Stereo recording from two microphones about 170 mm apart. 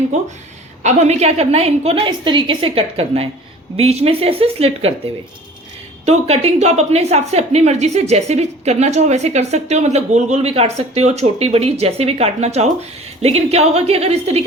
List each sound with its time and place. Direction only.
0.8 s a woman's voice: 40° right (ahead or behind)
6.1 s a woman's voice: 40° right (ahead or behind)